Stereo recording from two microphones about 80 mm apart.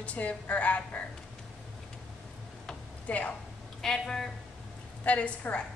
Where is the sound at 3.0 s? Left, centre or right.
Centre.